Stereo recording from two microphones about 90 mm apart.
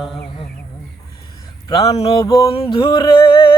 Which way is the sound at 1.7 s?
45° left (ahead or behind).